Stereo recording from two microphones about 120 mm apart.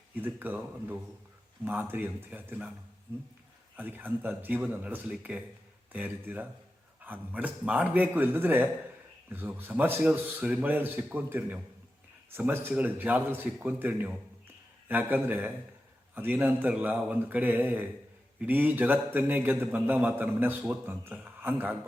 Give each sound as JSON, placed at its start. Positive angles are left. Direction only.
{"t": 0.2, "sound": "a man's voice", "side_deg": -15}
{"t": 3.8, "sound": "a man's voice", "side_deg": -15}